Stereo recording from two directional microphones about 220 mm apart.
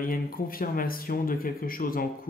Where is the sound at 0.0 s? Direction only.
40° left (ahead or behind).